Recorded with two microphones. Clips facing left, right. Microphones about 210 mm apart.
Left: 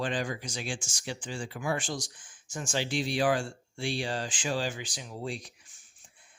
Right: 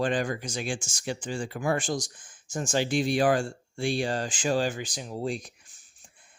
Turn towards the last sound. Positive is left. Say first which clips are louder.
# right 5 dB
turn(degrees=-40)  # may be behind; listen again after turning